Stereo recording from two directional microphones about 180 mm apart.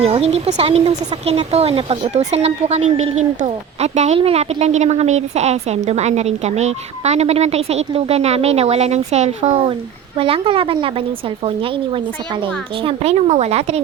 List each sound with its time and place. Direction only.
0.0 s speech: 35° right (ahead or behind)
12.8 s speech: 35° right (ahead or behind)